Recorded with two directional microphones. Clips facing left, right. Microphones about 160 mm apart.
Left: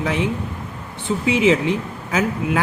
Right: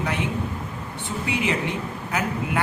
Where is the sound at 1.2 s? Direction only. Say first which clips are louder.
Left 9 dB; 90° left.